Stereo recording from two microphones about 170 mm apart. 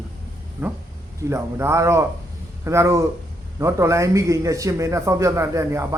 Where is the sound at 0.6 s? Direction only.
15° right (ahead or behind).